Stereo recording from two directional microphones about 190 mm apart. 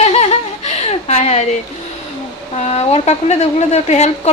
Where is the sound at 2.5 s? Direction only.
35° left (ahead or behind).